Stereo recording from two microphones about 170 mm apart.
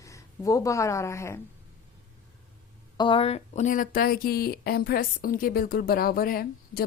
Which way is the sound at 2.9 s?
30° left (ahead or behind).